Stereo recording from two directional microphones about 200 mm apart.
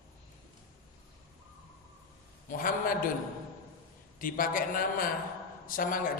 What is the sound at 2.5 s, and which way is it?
Speech, 45° left (ahead or behind).